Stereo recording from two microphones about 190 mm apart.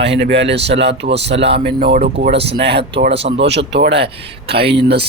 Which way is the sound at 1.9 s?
50° right (ahead or behind).